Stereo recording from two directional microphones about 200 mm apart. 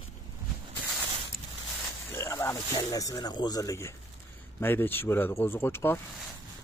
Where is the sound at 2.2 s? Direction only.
15° left (ahead or behind).